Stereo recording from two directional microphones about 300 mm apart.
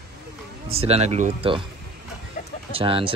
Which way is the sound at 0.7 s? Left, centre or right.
Centre.